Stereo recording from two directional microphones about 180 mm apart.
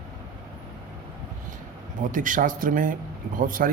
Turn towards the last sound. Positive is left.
turn(degrees=-50)  # may be behind; listen again after turning